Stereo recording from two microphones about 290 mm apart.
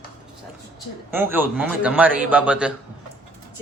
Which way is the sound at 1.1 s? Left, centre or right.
Centre.